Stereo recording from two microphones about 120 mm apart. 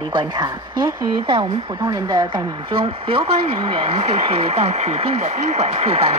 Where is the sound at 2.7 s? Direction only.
50° right (ahead or behind).